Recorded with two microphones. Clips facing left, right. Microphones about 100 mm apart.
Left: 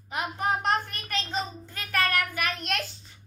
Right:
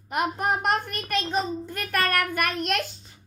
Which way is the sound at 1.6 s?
55° right (ahead or behind).